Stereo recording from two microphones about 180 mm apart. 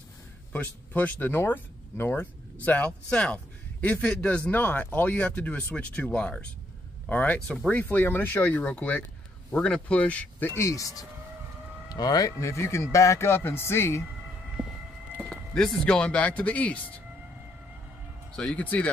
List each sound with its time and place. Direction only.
0.5 s a man's voice: 10° left (ahead or behind)
15.1 s speech: centre (ahead or behind)
18.3 s a man's voice: 5° left (ahead or behind)